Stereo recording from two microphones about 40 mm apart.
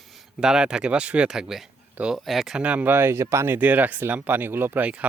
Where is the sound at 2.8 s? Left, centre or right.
Right.